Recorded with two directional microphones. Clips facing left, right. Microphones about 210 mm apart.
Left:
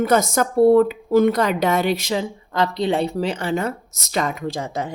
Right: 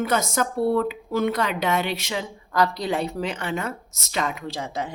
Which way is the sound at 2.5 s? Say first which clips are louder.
Left 3 dB; 25° left (ahead or behind).